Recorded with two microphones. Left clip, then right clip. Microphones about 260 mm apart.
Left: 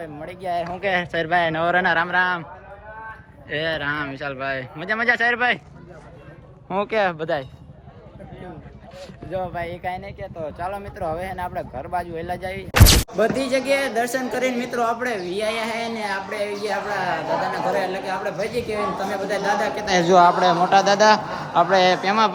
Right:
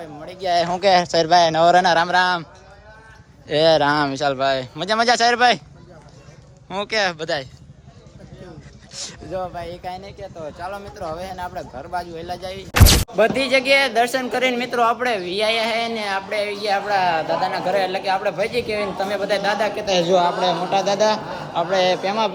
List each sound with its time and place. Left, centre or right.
0.0 s speech: centre
0.4 s speech: right
0.8 s speech: centre
3.5 s speech: centre
6.7 s speech: centre
9.3 s speech: centre
20.7 s speech: centre